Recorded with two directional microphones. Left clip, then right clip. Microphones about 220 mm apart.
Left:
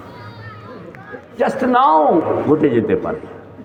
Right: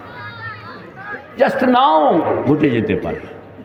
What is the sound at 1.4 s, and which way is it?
A man's voice, 50° right (ahead or behind).